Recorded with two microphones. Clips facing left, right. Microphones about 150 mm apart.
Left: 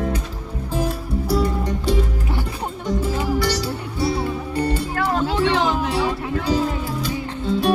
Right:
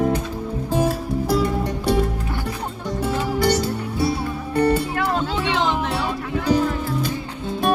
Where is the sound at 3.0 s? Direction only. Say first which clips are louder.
Right 2 dB; 50° right (ahead or behind).